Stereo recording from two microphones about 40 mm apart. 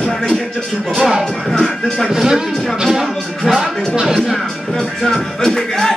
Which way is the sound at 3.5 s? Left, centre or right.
Centre.